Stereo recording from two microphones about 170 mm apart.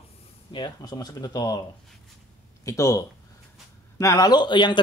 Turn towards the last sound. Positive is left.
turn(degrees=25)  # may be behind; listen again after turning